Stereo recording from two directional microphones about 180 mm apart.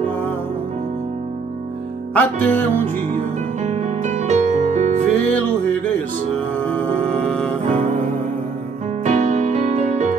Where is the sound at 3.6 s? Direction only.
40° right (ahead or behind).